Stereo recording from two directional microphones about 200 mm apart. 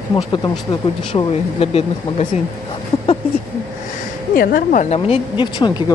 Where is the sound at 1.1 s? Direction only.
30° left (ahead or behind).